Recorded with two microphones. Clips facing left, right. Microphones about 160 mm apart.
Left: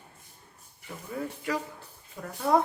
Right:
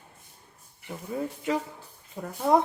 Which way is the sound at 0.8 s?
20° right (ahead or behind).